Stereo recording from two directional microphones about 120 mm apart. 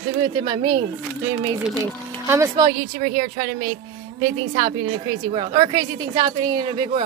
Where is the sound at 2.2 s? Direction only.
20° right (ahead or behind).